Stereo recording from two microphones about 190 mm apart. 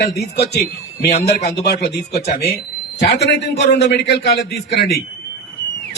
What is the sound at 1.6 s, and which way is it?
A man's voice, 60° left (ahead or behind).